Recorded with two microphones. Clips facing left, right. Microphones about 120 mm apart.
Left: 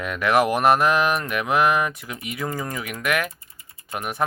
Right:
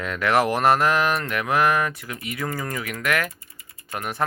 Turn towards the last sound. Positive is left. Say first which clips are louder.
# left 1 dB
turn(degrees=20)  # may be behind; listen again after turning